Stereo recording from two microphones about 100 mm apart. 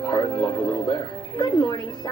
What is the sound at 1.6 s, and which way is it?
Speech, 35° left (ahead or behind).